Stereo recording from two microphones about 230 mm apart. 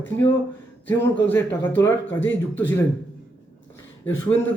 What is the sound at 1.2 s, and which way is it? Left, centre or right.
Speech, centre.